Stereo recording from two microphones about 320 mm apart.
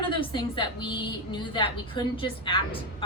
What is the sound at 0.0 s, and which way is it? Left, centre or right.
A woman's voice, centre.